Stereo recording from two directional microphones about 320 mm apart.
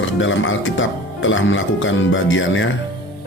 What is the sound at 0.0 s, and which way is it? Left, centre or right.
Speech, left.